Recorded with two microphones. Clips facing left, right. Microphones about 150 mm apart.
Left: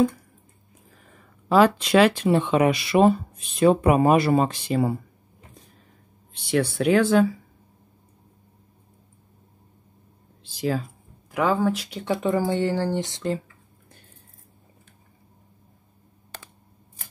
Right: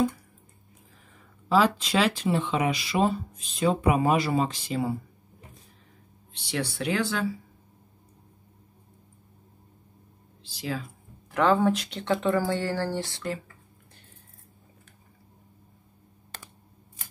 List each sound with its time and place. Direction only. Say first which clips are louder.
1.5 s speech: left 5 dB; 60° left (ahead or behind)
6.3 s speech: left 8 dB; 55° left (ahead or behind)
10.4 s speech: left 7 dB; 50° left (ahead or behind)
11.3 s speech: even; 5° left (ahead or behind); by 13.4 s 20° left (ahead or behind)